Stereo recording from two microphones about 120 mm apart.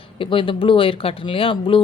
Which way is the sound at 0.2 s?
45° left (ahead or behind).